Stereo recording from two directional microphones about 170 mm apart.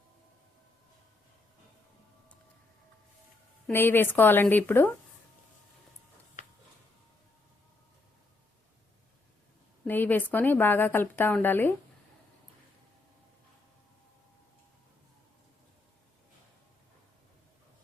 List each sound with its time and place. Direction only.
3.7 s a woman's voice: 10° left (ahead or behind)
6.4 s a sound: 50° left (ahead or behind)
9.8 s a woman's voice: 10° left (ahead or behind)